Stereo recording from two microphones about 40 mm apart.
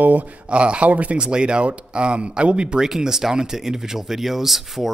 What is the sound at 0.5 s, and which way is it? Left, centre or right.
Speech, right.